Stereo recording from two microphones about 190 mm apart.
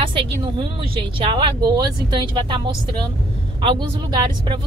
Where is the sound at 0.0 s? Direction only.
25° right (ahead or behind).